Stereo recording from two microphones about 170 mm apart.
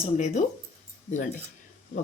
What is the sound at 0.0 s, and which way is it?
Speech, 40° left (ahead or behind).